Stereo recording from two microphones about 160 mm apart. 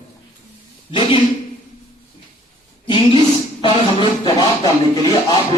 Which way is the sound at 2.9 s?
35° left (ahead or behind).